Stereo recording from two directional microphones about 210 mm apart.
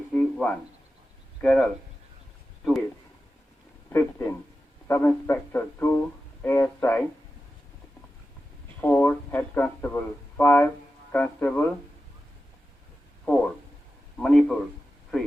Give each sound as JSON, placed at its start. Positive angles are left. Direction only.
{"t": 0.1, "sound": "a sound", "side_deg": 5}
{"t": 1.4, "sound": "speech", "side_deg": 5}
{"t": 3.8, "sound": "speech", "side_deg": 10}
{"t": 8.8, "sound": "speech", "side_deg": 10}
{"t": 13.2, "sound": "a man's voice", "side_deg": 5}